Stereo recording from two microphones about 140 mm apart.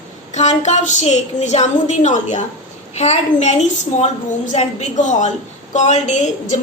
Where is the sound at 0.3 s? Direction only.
55° left (ahead or behind).